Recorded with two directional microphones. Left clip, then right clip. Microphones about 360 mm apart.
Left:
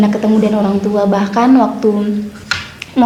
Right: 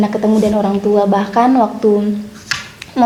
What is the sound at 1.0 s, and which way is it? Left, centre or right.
Speech, right.